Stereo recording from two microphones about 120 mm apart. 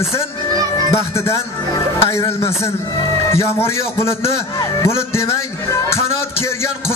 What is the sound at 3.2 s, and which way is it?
Speech, 20° left (ahead or behind).